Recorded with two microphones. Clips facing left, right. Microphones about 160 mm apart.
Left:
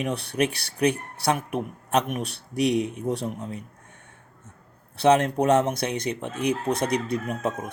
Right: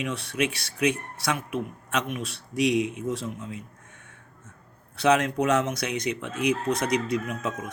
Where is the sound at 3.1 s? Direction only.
65° left (ahead or behind).